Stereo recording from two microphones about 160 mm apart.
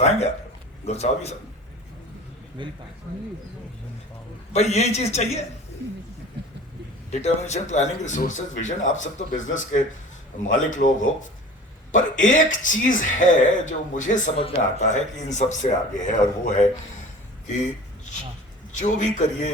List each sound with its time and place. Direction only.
0.0 s speech: 40° left (ahead or behind)
2.6 s speech: 30° right (ahead or behind)
4.5 s speech: 45° left (ahead or behind)
7.1 s speech: 45° left (ahead or behind)
17.4 s a sound: 50° left (ahead or behind)
18.8 s speech: 50° left (ahead or behind)